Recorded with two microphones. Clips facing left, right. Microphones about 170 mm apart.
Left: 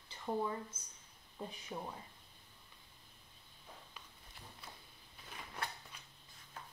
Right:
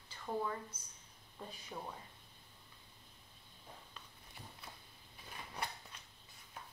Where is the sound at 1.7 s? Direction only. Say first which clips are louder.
Left 2 dB; 10° left (ahead or behind).